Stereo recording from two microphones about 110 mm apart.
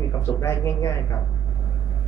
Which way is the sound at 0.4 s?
25° left (ahead or behind).